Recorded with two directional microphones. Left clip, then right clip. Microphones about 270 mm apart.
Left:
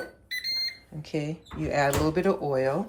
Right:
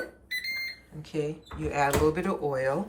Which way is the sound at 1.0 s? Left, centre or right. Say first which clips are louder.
Right 1 dB; left.